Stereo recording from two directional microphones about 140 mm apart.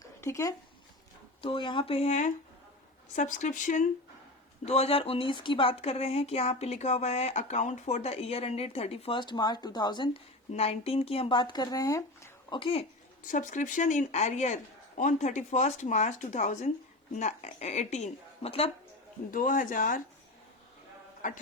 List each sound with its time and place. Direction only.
0.0 s a sound: 20° left (ahead or behind)
1.4 s speech: 40° left (ahead or behind); by 3.8 s 65° left (ahead or behind)
4.6 s speech: 50° left (ahead or behind); by 10.1 s 30° left (ahead or behind)
10.5 s speech: 50° left (ahead or behind); by 12.5 s 25° left (ahead or behind)
12.5 s speech: 40° left (ahead or behind)
13.2 s speech: 70° left (ahead or behind); by 18.7 s 45° left (ahead or behind)
19.3 s speech: 75° left (ahead or behind)
21.2 s speech: 70° left (ahead or behind)